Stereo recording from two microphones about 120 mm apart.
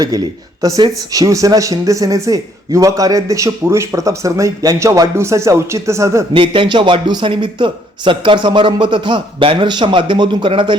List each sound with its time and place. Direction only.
0.1 s speech: 30° right (ahead or behind)
6.3 s a man's voice: 45° right (ahead or behind)